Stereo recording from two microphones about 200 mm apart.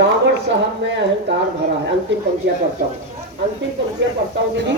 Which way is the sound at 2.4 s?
55° right (ahead or behind).